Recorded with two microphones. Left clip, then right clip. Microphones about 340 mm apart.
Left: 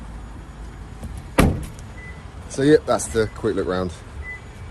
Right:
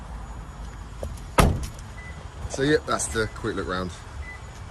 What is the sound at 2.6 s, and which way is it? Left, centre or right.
Speech, centre.